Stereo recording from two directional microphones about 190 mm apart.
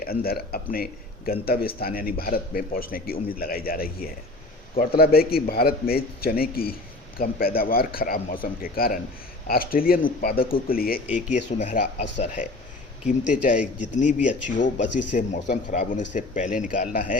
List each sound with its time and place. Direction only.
0.0 s a man's voice: 50° left (ahead or behind)
11.0 s speech: 5° right (ahead or behind)
11.3 s a man's voice: 40° left (ahead or behind)